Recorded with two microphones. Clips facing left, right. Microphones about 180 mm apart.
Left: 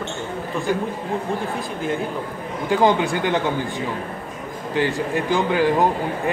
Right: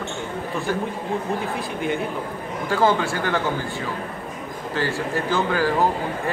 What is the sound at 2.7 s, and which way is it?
A man's voice, 20° left (ahead or behind).